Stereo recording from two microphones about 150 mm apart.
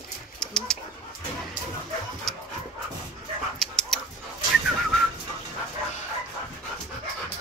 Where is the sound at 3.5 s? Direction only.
5° left (ahead or behind).